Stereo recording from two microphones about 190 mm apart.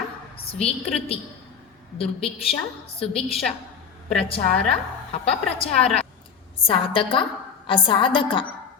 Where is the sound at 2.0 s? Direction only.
30° left (ahead or behind).